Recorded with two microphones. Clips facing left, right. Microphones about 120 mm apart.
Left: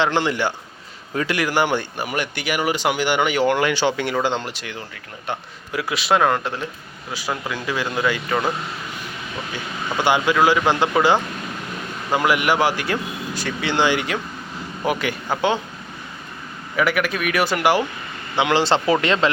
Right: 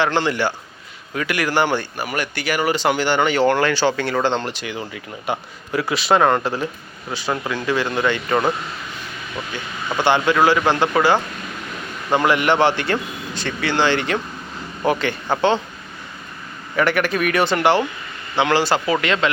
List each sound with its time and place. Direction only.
0.0 s speech: 15° left (ahead or behind)
1.1 s a man's voice: 25° left (ahead or behind)
1.5 s speech: 15° left (ahead or behind)
10.0 s speech: 10° left (ahead or behind)
16.7 s a man's voice: centre (ahead or behind); by 19.3 s 30° left (ahead or behind)